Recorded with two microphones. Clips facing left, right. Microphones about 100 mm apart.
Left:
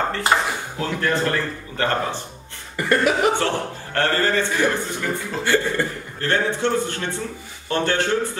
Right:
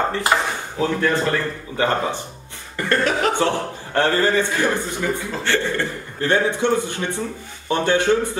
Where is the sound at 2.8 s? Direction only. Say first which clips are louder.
Left 1 dB; 10° left (ahead or behind).